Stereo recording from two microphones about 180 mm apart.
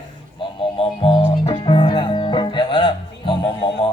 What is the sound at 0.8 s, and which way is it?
Music, 30° left (ahead or behind).